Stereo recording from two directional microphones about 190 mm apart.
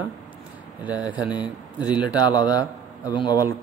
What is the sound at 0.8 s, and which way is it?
Speech, 5° right (ahead or behind).